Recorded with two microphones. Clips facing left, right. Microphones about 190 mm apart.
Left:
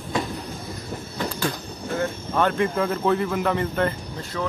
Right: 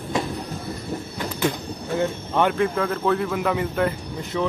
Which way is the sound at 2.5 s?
Centre (ahead or behind).